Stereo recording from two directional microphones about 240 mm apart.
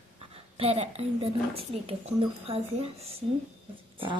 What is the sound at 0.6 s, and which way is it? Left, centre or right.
Speech, right.